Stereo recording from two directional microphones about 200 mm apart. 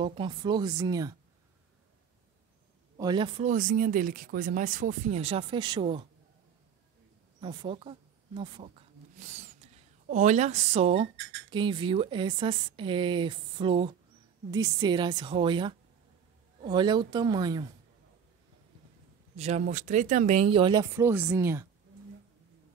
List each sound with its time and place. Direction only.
0.0 s speech: 25° right (ahead or behind)
3.0 s speech: 20° right (ahead or behind)
3.4 s speech: 40° right (ahead or behind)
7.3 s speech: 25° right (ahead or behind)
9.1 s speech: 35° right (ahead or behind); by 17.6 s 20° right (ahead or behind)
19.3 s speech: 35° right (ahead or behind); by 21.6 s 15° right (ahead or behind)